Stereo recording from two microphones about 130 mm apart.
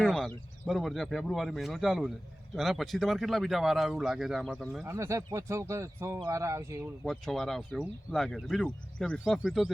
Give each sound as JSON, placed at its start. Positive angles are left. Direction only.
{"t": 0.0, "sound": "speech", "side_deg": 5}
{"t": 4.9, "sound": "speech", "side_deg": -20}
{"t": 7.0, "sound": "speech", "side_deg": 0}